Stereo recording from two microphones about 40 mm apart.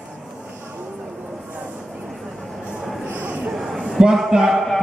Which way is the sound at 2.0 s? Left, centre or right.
Centre.